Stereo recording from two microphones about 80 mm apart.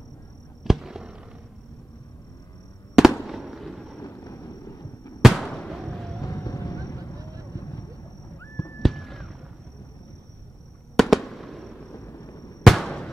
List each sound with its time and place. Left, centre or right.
0.7 s fireworks: centre
3.0 s fireworks: centre
4.0 s fireworks: left
5.2 s fireworks: centre
6.2 s vehicle: left
8.4 s a sound: left
8.8 s fireworks: centre
11.0 s fireworks: centre
11.9 s a sound: left
12.6 s fireworks: centre